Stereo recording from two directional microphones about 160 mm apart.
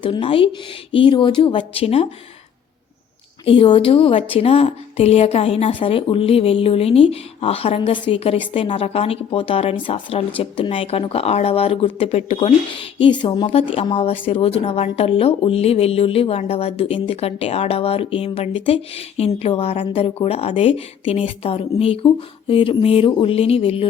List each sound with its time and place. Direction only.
0.0 s speech: 30° left (ahead or behind)
3.4 s speech: 35° left (ahead or behind)